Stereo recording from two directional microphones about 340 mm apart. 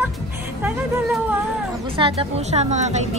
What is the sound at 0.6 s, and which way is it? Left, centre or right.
Music, centre.